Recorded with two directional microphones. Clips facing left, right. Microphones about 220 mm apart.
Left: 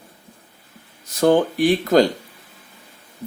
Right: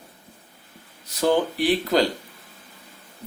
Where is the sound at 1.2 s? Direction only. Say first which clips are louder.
Left 5 dB; 50° left (ahead or behind).